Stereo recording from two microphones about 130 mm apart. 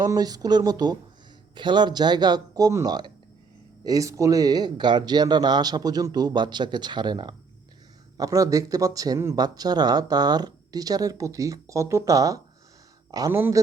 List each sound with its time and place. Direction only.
0.0 s speech: 30° right (ahead or behind)